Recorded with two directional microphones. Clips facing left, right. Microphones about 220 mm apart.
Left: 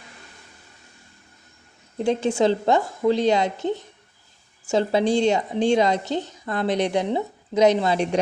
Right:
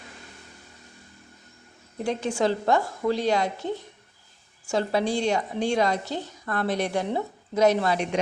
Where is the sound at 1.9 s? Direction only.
25° left (ahead or behind).